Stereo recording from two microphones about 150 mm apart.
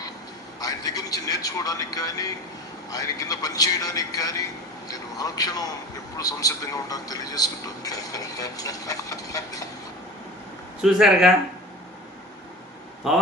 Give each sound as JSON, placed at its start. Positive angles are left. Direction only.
{"t": 0.6, "sound": "speech", "side_deg": 25}
{"t": 10.8, "sound": "speech", "side_deg": -5}
{"t": 13.0, "sound": "speech", "side_deg": 0}